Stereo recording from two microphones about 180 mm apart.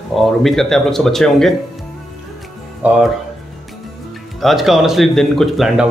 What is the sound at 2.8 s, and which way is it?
Speech, 10° right (ahead or behind).